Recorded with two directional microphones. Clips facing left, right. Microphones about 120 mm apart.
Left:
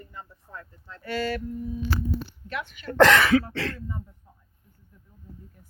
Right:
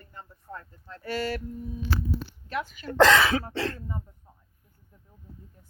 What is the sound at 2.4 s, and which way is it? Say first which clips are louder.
Speech: right 2 dB; 40° right (ahead or behind).